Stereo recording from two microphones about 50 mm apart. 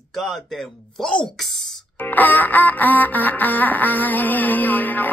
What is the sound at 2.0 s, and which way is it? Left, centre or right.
Music, left.